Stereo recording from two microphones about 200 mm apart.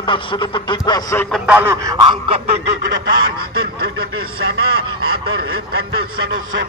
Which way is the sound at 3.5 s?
50° right (ahead or behind).